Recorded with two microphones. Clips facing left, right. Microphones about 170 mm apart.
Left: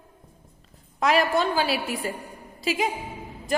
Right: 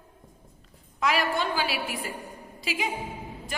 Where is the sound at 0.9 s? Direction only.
40° left (ahead or behind).